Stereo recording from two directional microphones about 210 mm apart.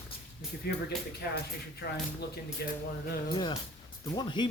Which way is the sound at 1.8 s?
50° left (ahead or behind).